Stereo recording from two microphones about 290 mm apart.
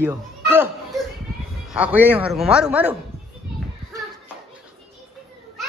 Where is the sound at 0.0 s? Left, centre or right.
Centre.